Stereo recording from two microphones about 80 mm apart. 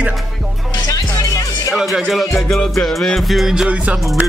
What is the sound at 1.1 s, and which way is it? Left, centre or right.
Music, left.